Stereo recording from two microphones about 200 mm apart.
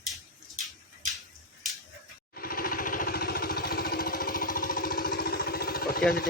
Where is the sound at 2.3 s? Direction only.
45° left (ahead or behind).